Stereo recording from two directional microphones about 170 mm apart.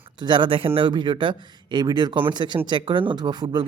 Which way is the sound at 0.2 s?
25° right (ahead or behind).